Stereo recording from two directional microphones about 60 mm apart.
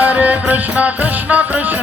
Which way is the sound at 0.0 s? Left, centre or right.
Right.